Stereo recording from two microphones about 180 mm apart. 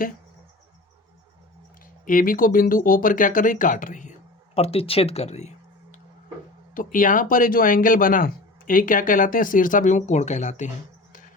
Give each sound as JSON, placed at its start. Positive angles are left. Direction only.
{"t": 2.0, "sound": "speech", "side_deg": 50}
{"t": 4.5, "sound": "speech", "side_deg": 35}